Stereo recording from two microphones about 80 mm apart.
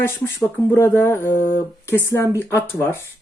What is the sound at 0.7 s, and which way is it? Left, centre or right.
Speech, left.